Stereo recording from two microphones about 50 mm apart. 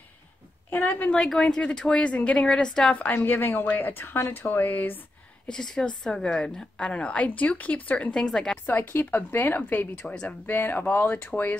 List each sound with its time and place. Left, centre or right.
0.7 s a woman's voice: left
1.2 s speech: centre
1.6 s a woman's voice: centre
3.1 s speech: left
5.5 s a woman's voice: centre; by 8.1 s left
8.1 s speech: centre
8.6 s speech: left
10.2 s speech: left